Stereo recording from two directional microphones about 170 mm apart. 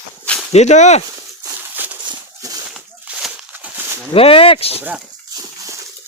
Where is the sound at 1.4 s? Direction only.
10° right (ahead or behind).